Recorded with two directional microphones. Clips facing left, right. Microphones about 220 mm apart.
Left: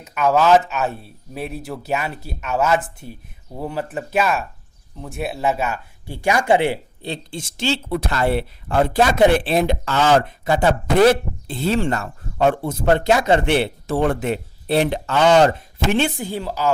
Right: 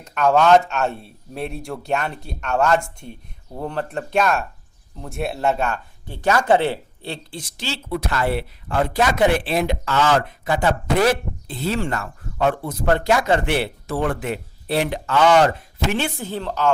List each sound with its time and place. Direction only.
0.0 s speech: 5° left (ahead or behind); by 15.5 s 30° left (ahead or behind)
16.0 s a woman's voice: 20° left (ahead or behind)